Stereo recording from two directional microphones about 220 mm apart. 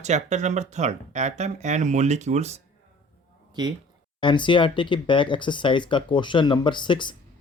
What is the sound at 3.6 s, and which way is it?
Speech, 20° right (ahead or behind).